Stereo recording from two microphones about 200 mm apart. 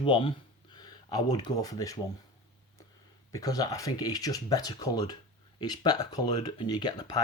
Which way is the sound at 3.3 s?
20° left (ahead or behind).